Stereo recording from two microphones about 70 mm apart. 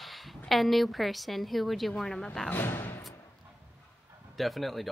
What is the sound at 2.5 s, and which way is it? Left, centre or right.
Speech, left.